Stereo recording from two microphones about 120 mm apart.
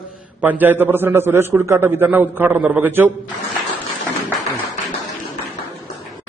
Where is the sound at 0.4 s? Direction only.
15° right (ahead or behind).